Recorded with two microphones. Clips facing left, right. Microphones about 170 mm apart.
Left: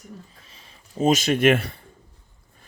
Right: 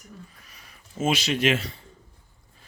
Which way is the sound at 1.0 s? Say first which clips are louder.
Left 5 dB; 45° left (ahead or behind).